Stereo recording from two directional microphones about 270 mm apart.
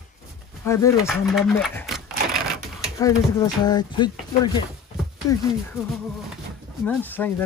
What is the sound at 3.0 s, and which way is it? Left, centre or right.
A child's voice, centre.